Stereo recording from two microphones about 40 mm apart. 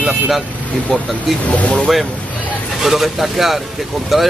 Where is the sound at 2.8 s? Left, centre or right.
Centre.